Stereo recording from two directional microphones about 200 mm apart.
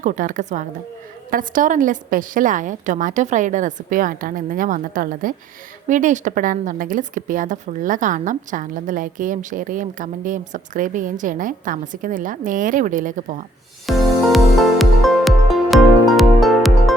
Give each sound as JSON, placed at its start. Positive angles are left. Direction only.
{"t": 0.0, "sound": "a woman's voice", "side_deg": -40}
{"t": 13.8, "sound": "music", "side_deg": 0}